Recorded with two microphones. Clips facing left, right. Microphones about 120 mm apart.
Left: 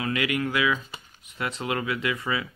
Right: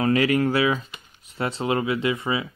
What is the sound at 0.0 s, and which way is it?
Speech, 35° right (ahead or behind).